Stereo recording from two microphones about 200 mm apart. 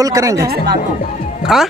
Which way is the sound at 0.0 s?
15° right (ahead or behind).